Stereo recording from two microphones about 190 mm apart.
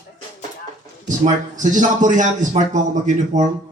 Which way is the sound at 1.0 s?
40° right (ahead or behind).